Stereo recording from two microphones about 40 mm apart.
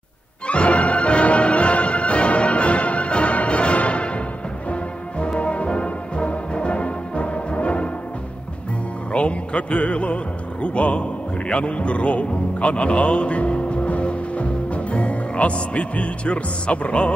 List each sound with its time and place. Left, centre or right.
0.5 s music: left
5.2 s music: left
9.1 s a sound: left
10.6 s a man's voice: left